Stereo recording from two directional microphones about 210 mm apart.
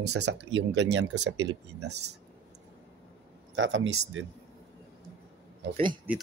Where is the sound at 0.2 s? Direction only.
60° right (ahead or behind).